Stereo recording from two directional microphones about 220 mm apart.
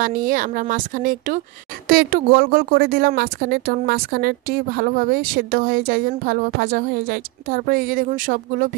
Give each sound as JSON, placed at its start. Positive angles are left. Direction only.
{"t": 0.0, "sound": "a woman's voice", "side_deg": -35}